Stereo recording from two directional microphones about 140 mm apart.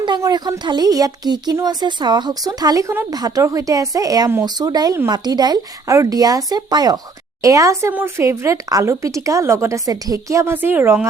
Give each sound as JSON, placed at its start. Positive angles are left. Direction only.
{"t": 0.0, "sound": "speech", "side_deg": -30}